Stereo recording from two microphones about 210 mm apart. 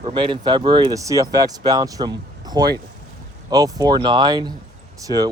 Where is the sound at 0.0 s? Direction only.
20° right (ahead or behind).